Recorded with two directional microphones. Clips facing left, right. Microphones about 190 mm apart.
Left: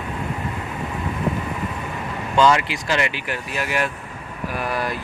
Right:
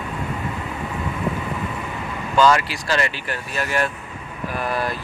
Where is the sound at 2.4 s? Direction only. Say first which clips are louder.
Even; 20° left (ahead or behind).